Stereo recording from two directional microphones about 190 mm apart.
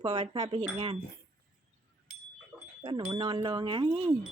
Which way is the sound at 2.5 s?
Centre (ahead or behind).